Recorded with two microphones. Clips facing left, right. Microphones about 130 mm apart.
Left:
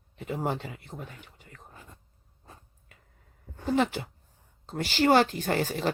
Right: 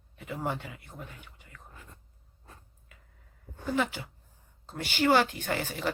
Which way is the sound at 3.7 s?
35° left (ahead or behind).